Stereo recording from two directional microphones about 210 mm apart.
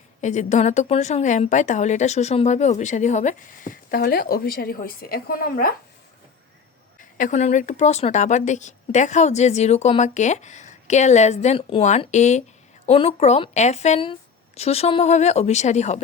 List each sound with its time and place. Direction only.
0.2 s a woman's voice: 35° left (ahead or behind)
7.0 s a woman's voice: 40° left (ahead or behind)